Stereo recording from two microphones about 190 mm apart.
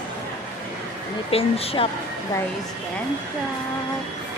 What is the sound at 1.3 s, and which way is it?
Speech, 30° left (ahead or behind).